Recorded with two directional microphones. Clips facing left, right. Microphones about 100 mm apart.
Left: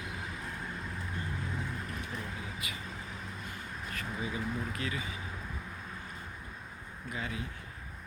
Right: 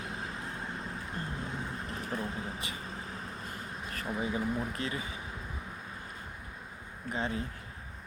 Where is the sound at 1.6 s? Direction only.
35° right (ahead or behind).